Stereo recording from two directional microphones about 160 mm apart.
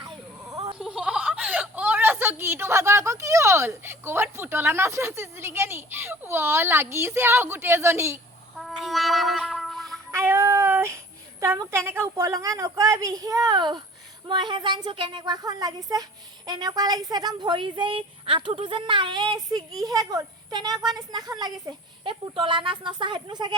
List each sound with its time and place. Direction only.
0.5 s a sound: 25° right (ahead or behind)
0.8 s a woman's voice: 5° right (ahead or behind)
8.5 s gargling: centre (ahead or behind)
10.1 s speech: 15° right (ahead or behind)